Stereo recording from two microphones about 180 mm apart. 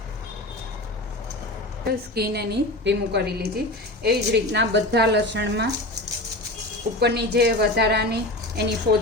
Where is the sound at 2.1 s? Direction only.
60° right (ahead or behind).